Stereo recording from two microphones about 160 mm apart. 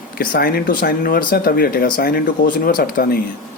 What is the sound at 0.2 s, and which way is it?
Speech, 70° left (ahead or behind).